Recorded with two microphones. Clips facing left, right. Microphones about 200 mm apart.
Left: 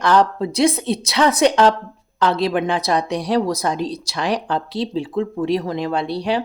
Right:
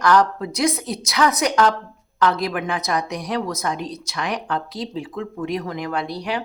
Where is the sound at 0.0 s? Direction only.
30° left (ahead or behind).